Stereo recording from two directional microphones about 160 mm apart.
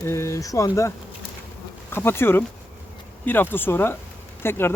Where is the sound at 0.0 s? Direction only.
15° left (ahead or behind).